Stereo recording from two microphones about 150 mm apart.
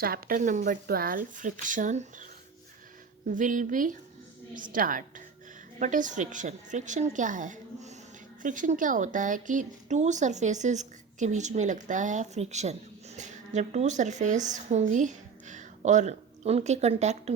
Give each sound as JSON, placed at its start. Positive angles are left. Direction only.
{"t": 0.0, "sound": "speech", "side_deg": -80}
{"t": 3.2, "sound": "a woman's voice", "side_deg": -60}